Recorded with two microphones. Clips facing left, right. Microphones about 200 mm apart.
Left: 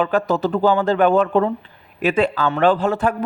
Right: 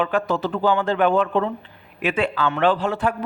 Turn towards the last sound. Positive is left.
turn(degrees=45)  # may be behind; listen again after turning